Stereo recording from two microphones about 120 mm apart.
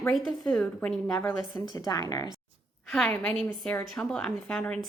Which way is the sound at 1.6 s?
30° left (ahead or behind).